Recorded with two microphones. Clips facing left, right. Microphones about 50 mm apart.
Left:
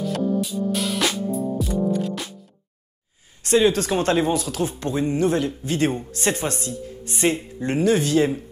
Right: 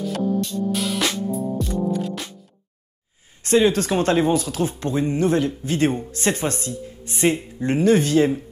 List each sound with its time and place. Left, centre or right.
0.0 s music: centre
3.4 s speech: right
7.2 s speech: centre
7.6 s speech: right